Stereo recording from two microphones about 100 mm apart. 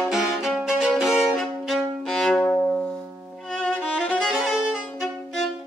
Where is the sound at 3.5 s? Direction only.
10° left (ahead or behind).